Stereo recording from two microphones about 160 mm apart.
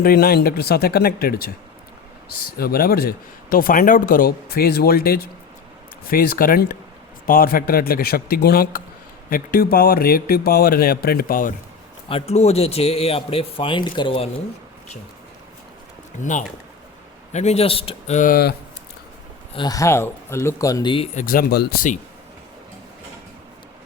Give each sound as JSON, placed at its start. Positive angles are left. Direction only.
{"t": 0.0, "sound": "speech", "side_deg": 70}
{"t": 12.0, "sound": "speech", "side_deg": 40}
{"t": 16.2, "sound": "speech", "side_deg": 50}
{"t": 19.5, "sound": "speech", "side_deg": 25}
{"t": 21.2, "sound": "speech", "side_deg": 65}